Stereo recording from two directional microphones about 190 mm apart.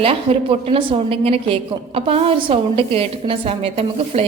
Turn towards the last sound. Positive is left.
turn(degrees=-30)  # may be behind; listen again after turning